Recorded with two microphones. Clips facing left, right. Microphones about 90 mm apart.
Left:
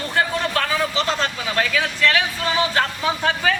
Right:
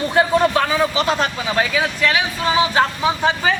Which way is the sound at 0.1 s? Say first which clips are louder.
Right 6 dB; 15° right (ahead or behind).